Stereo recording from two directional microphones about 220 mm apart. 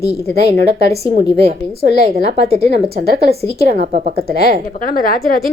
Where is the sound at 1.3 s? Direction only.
25° right (ahead or behind).